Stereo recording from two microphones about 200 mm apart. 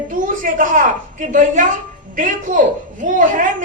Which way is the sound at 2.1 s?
40° right (ahead or behind).